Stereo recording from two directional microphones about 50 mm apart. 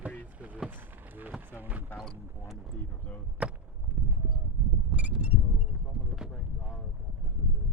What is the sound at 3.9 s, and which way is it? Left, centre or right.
Clip-clop, right.